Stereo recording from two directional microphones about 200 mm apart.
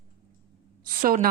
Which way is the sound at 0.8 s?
45° right (ahead or behind).